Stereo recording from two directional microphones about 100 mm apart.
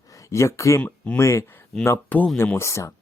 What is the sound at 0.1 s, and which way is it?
Speech, 30° left (ahead or behind).